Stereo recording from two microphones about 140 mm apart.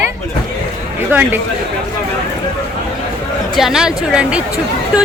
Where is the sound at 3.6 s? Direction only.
5° right (ahead or behind).